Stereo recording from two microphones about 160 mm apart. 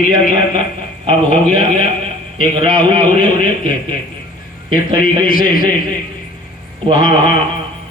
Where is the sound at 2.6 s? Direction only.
55° left (ahead or behind).